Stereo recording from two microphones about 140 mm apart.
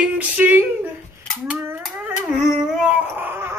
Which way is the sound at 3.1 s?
15° right (ahead or behind).